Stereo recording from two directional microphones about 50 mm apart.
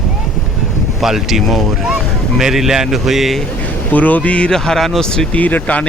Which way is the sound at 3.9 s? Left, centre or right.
Left.